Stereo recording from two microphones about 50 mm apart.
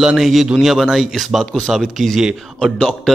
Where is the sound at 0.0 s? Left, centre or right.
Centre.